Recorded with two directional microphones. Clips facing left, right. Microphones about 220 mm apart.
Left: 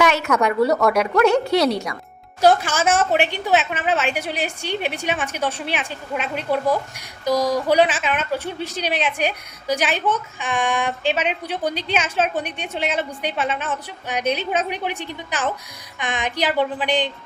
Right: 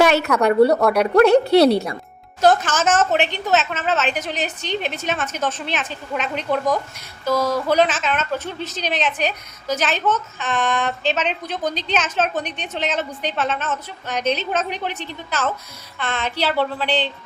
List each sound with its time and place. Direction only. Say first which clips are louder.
0.0 s a sound: right 3 dB; 35° right (ahead or behind)
0.4 s speech: right 4 dB; 30° right (ahead or behind)
2.4 s a woman's voice: even; 10° left (ahead or behind)